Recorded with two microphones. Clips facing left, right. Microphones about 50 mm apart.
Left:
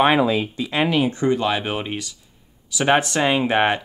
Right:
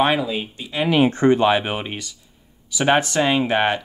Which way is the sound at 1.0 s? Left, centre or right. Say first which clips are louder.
Right 4 dB; right.